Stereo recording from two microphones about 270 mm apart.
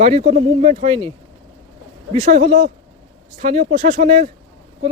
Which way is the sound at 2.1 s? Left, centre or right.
Right.